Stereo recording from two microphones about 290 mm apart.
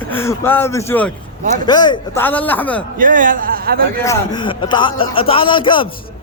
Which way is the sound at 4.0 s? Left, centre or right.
Centre.